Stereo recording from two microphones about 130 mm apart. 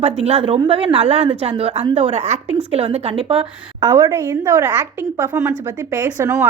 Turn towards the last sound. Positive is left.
turn(degrees=-25)  # may be behind; listen again after turning